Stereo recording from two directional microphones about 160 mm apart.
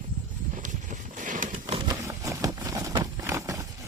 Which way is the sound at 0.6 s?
50° right (ahead or behind).